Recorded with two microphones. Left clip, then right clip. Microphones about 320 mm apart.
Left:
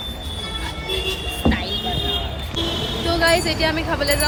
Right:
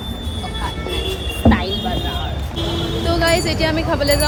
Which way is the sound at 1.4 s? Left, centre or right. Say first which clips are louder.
Right 6 dB; centre.